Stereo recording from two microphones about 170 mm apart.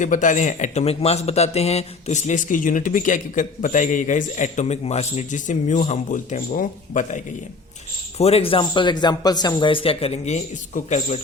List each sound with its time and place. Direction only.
0.0 s a man's voice: 50° left (ahead or behind)
8.2 s a man's voice: 35° left (ahead or behind)